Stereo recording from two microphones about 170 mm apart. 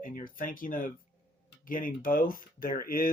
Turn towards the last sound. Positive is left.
turn(degrees=60)  # may be behind; listen again after turning